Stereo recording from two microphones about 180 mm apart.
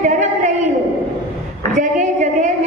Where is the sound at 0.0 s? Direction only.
40° right (ahead or behind).